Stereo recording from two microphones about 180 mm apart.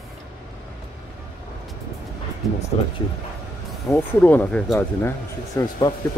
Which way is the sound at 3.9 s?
10° left (ahead or behind).